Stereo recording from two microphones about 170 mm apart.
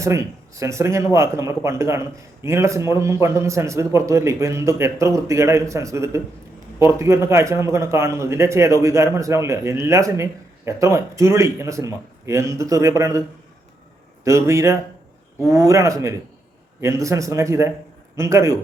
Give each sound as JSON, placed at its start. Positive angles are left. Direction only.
{"t": 0.0, "sound": "a man's voice", "side_deg": -20}
{"t": 14.3, "sound": "a man's voice", "side_deg": -15}